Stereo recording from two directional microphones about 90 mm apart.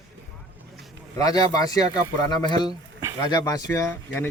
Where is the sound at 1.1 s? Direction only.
45° left (ahead or behind).